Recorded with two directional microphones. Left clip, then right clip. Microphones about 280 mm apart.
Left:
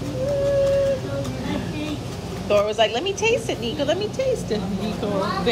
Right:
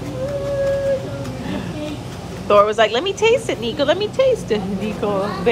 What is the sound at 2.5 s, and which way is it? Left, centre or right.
Speech, right.